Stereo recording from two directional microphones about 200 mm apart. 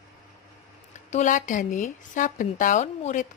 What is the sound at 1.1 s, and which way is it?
Speech, 40° left (ahead or behind).